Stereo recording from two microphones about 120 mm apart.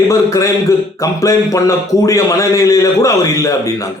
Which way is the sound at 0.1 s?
25° left (ahead or behind).